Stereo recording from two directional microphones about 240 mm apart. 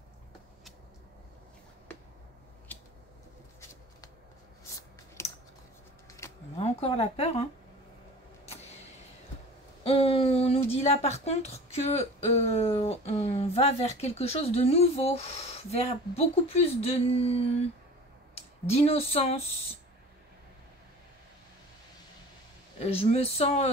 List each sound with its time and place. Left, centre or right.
5.2 s scissors: centre
6.2 s a sound: centre
6.6 s speech: left
9.8 s a woman's voice: left
18.7 s a woman's voice: left
22.8 s a woman's voice: left